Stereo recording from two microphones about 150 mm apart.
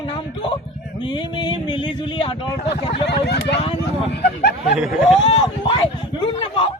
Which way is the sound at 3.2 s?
90° left.